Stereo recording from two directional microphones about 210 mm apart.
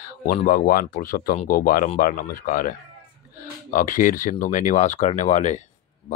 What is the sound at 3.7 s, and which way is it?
Speech, 40° left (ahead or behind).